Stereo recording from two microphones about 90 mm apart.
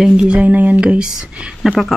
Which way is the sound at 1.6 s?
Centre (ahead or behind).